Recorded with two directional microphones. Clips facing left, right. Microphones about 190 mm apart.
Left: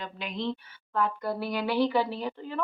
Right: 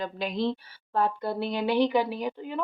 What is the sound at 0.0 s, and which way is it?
A woman's voice, 35° right (ahead or behind).